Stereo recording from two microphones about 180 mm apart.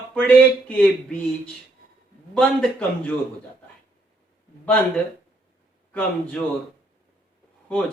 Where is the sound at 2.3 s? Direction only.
5° left (ahead or behind).